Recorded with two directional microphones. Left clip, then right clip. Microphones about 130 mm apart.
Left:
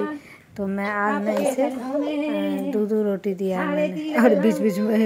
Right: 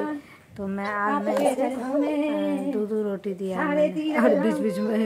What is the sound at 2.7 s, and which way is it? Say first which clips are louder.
A woman's voice: left 4 dB; 25° left (ahead or behind).